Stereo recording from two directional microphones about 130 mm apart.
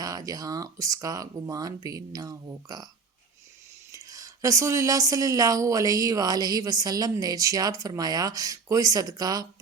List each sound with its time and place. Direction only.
0.0 s speech: 30° right (ahead or behind)
3.9 s speech: 25° right (ahead or behind)